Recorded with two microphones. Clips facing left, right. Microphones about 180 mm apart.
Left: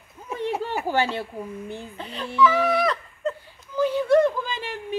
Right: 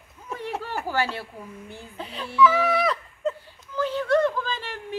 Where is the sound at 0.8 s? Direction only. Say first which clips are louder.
Left 3 dB; 20° left (ahead or behind).